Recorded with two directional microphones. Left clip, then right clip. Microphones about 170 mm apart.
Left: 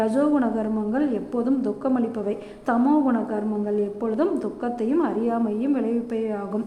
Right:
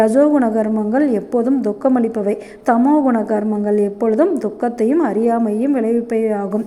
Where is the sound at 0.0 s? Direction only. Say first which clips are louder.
Right 9 dB; 30° right (ahead or behind).